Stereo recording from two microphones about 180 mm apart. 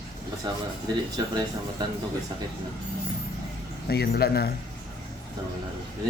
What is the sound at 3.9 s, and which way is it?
Speech, 60° left (ahead or behind).